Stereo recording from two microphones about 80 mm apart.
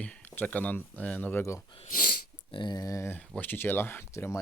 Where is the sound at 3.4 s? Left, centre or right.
Left.